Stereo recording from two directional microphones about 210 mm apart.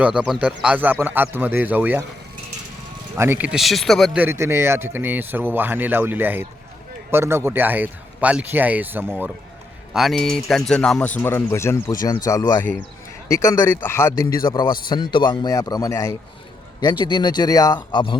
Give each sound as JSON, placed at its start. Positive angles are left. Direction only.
{"t": 0.0, "sound": "speech", "side_deg": -5}
{"t": 3.2, "sound": "a man's voice", "side_deg": -10}